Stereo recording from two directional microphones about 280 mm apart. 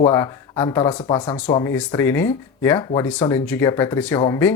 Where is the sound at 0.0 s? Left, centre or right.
Centre.